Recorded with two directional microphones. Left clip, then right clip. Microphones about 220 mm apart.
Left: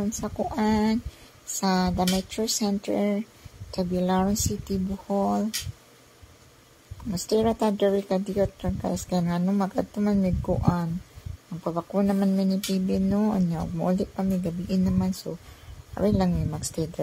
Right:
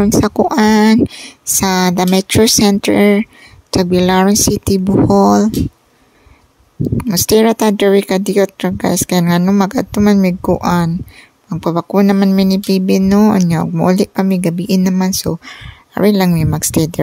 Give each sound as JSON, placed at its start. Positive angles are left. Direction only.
{"t": 0.0, "sound": "speech", "side_deg": -45}
{"t": 7.1, "sound": "speech", "side_deg": -50}